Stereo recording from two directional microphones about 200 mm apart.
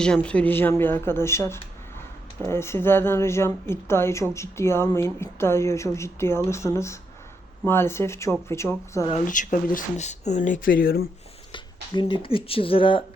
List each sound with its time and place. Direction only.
0.0 s a woman's voice: 5° left (ahead or behind)
9.0 s speech: 35° left (ahead or behind)
11.5 s speech: 25° left (ahead or behind)